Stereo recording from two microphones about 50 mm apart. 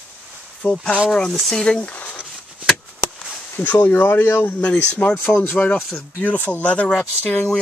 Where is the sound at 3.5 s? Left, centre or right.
Left.